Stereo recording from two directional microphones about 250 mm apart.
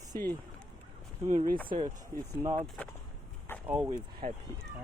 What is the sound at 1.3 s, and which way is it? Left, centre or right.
Speech, right.